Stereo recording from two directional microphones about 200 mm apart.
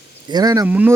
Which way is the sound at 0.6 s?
10° right (ahead or behind).